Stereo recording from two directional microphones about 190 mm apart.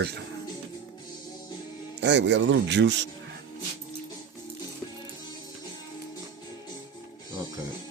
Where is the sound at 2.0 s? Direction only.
70° right (ahead or behind).